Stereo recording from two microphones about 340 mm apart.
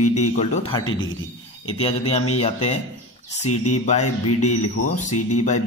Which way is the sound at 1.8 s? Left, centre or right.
Centre.